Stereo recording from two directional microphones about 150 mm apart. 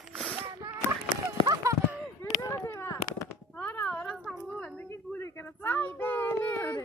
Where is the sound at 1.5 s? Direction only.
20° right (ahead or behind).